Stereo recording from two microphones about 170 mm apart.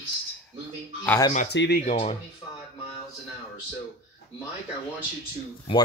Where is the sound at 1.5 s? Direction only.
90° left.